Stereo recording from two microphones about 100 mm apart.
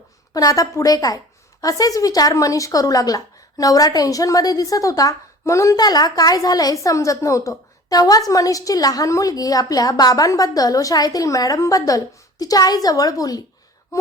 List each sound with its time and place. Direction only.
0.3 s a woman's voice: 35° left (ahead or behind)